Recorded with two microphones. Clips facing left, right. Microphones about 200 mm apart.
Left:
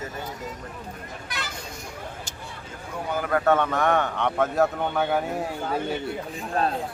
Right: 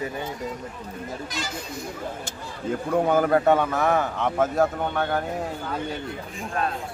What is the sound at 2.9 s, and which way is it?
Speech, 55° right (ahead or behind).